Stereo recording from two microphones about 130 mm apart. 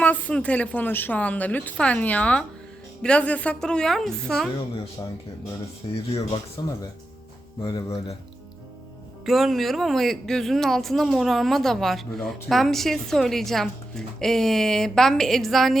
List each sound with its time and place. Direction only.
0.0 s a woman's voice: 10° left (ahead or behind)
6.6 s speech: 30° left (ahead or behind)
7.6 s speech: 40° left (ahead or behind)
9.2 s speech: centre (ahead or behind)